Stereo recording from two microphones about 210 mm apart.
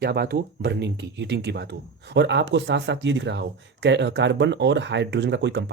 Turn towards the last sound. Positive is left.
turn(degrees=-55)  # may be behind; listen again after turning